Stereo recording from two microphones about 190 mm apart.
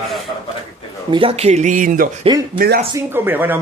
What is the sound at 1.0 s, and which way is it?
Speech, 30° right (ahead or behind).